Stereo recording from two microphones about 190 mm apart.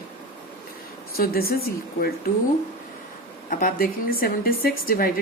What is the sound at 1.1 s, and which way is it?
Speech, 50° left (ahead or behind).